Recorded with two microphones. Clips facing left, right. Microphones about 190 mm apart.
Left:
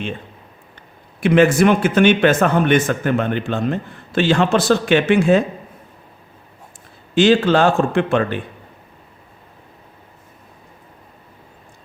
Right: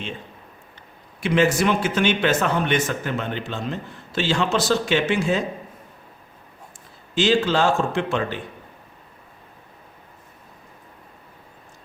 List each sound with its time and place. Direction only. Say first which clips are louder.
1.2 s a man's voice: left 6 dB; 55° left (ahead or behind)
7.2 s a man's voice: left 6 dB; 55° left (ahead or behind)